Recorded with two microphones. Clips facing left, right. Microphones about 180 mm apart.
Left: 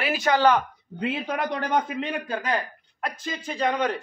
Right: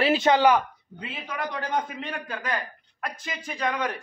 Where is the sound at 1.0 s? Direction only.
60° left (ahead or behind).